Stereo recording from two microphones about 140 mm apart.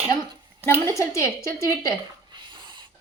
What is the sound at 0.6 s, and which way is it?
A woman's voice, 20° left (ahead or behind).